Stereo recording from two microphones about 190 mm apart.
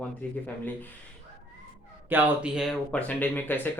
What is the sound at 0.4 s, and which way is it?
Speech, 10° left (ahead or behind).